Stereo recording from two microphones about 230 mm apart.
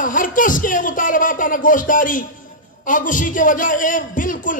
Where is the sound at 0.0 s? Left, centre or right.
Left.